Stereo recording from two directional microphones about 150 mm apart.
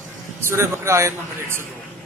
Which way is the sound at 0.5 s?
15° right (ahead or behind).